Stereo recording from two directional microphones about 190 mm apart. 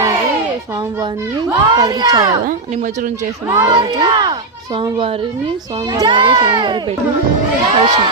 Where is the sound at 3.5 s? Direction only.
20° right (ahead or behind).